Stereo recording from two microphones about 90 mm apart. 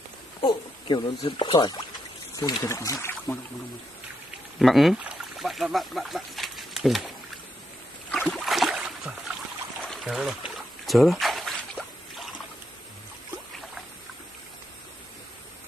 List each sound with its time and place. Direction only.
0.4 s speech: 55° left (ahead or behind)
2.3 s speech: 40° left (ahead or behind)
4.6 s speech: centre (ahead or behind)
8.1 s boat: 5° left (ahead or behind)
9.8 s a sound: centre (ahead or behind)